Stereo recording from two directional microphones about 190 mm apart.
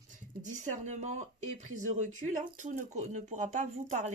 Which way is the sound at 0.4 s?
40° right (ahead or behind).